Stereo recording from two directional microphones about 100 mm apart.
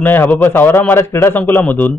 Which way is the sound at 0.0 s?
20° left (ahead or behind).